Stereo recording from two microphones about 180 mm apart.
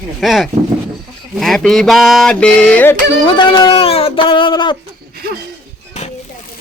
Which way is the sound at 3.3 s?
25° left (ahead or behind).